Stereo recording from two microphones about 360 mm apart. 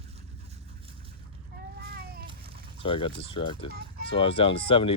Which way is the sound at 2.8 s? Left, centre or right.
Centre.